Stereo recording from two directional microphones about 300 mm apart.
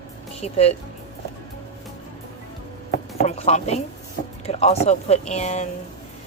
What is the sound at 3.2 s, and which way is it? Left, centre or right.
Speech, left.